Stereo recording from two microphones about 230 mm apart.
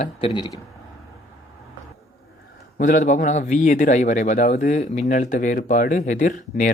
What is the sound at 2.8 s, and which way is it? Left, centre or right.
Speech, left.